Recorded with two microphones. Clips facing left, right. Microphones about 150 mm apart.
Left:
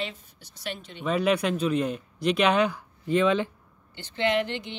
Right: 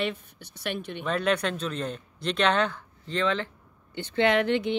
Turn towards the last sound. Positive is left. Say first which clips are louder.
# right 3 dB
turn(degrees=-55)  # may be behind; listen again after turning